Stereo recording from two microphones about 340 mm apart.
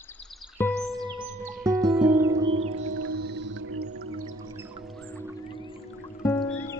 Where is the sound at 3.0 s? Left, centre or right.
Right.